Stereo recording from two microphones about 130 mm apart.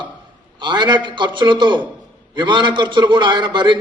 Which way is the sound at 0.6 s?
35° right (ahead or behind).